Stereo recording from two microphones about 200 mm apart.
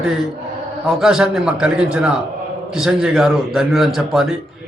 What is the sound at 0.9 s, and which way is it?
A man's voice, centre (ahead or behind).